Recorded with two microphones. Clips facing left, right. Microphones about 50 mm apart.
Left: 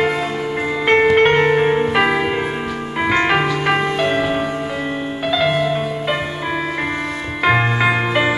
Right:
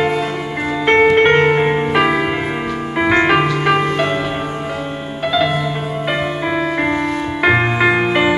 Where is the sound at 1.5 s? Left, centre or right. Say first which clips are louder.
Even; centre.